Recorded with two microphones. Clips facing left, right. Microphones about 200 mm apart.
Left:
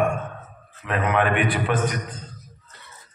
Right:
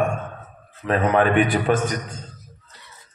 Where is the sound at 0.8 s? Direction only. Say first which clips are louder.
Right 4 dB; 35° right (ahead or behind).